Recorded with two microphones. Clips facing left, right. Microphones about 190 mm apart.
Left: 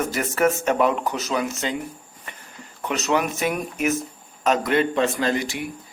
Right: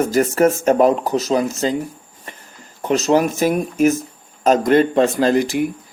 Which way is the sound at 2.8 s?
35° right (ahead or behind).